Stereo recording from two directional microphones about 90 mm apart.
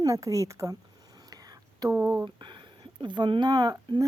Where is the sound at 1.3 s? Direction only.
45° right (ahead or behind).